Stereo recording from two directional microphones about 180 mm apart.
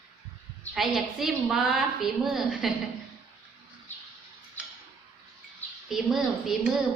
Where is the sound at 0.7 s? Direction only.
Centre (ahead or behind).